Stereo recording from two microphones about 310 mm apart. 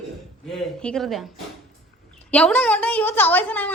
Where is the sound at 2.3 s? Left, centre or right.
Centre.